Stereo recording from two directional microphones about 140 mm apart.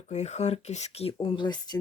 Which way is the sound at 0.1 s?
55° left (ahead or behind).